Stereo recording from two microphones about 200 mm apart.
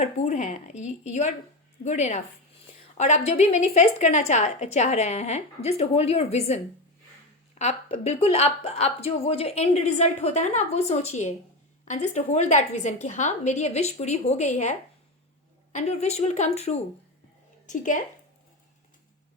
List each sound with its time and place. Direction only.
0.0 s a woman's voice: 35° left (ahead or behind)